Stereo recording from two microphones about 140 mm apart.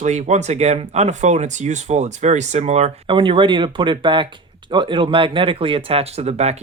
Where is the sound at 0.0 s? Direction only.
55° right (ahead or behind).